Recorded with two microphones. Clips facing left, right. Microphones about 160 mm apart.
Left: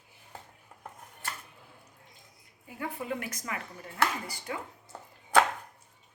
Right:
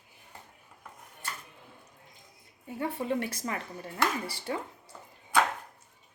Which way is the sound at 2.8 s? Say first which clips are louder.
Right 4 dB; 30° right (ahead or behind).